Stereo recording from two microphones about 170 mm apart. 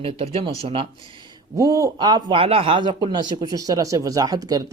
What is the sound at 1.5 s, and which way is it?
Speech, 20° right (ahead or behind).